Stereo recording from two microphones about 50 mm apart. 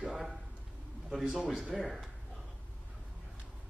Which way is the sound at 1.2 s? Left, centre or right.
Centre.